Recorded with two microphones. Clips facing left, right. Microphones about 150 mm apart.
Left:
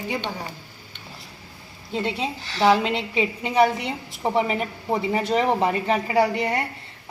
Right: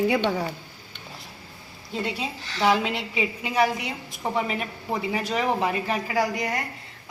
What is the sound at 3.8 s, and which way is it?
Speech, 20° right (ahead or behind).